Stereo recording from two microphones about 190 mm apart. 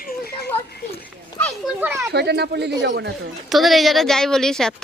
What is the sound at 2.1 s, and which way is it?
Speech, 60° right (ahead or behind).